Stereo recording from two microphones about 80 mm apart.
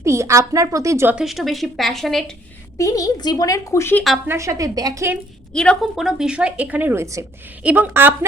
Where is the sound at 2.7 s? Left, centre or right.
Left.